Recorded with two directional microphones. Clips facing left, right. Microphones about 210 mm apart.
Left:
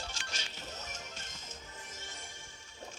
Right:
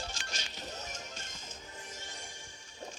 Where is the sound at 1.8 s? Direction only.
15° right (ahead or behind).